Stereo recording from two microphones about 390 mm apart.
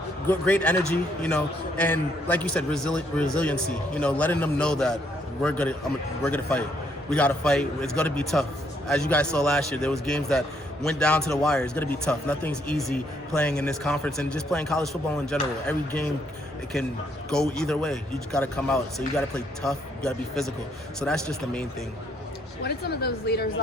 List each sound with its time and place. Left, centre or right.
0.3 s speech: centre
17.2 s speech: centre
22.6 s a woman's voice: left